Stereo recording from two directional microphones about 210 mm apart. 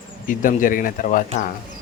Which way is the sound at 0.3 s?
40° left (ahead or behind).